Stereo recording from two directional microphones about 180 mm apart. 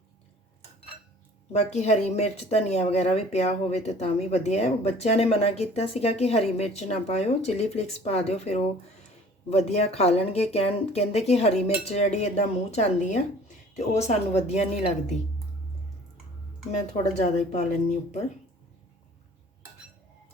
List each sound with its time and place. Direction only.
1.5 s speech: 40° left (ahead or behind)
17.2 s speech: 40° left (ahead or behind)